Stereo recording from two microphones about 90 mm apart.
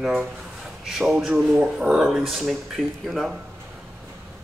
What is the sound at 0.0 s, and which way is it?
Speech, 5° right (ahead or behind).